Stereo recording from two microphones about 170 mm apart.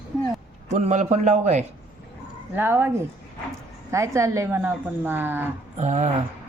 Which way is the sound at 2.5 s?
15° right (ahead or behind).